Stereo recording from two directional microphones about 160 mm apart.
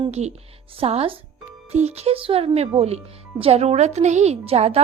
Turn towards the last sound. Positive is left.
turn(degrees=-40)  # may be behind; listen again after turning